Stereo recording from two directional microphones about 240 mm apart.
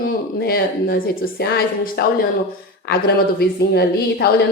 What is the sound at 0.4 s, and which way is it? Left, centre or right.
Speech, left.